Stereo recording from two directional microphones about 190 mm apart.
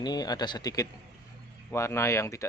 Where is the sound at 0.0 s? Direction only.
20° left (ahead or behind).